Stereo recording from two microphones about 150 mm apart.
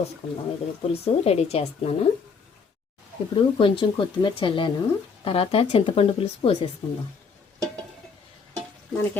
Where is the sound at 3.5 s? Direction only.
35° left (ahead or behind).